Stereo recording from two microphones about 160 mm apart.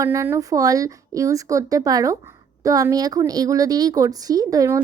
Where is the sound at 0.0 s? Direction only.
20° right (ahead or behind).